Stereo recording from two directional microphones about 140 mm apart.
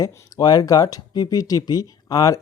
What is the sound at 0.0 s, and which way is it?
Speech, 25° left (ahead or behind).